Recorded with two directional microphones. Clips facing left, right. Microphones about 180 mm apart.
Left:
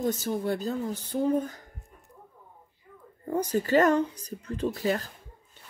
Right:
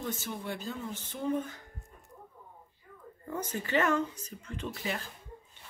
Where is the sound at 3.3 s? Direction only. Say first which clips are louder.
Left 9 dB; 35° left (ahead or behind).